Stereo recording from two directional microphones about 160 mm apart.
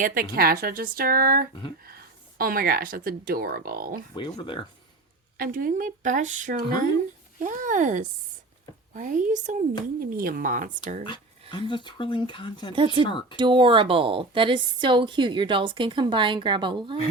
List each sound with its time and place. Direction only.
0.0 s speech: 60° right (ahead or behind)
4.1 s speech: 30° left (ahead or behind)
5.4 s speech: 60° right (ahead or behind)
10.0 s speech: 65° right (ahead or behind)
11.7 s speech: 30° left (ahead or behind)
13.3 s a woman's voice: 30° right (ahead or behind)